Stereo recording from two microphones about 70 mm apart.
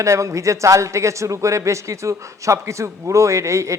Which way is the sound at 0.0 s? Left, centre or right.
Right.